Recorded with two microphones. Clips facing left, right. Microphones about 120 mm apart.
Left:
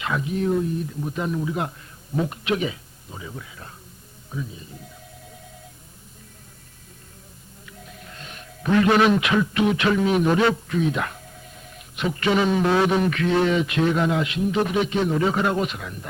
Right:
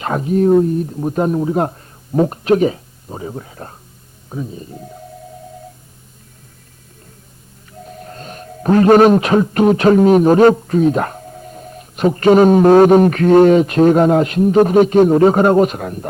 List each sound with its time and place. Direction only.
0.0 s speech: 45° right (ahead or behind)
7.6 s a man's voice: 40° right (ahead or behind)